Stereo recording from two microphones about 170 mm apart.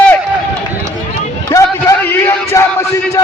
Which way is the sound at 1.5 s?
20° left (ahead or behind).